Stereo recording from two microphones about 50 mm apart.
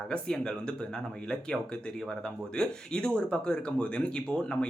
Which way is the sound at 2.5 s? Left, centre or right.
Centre.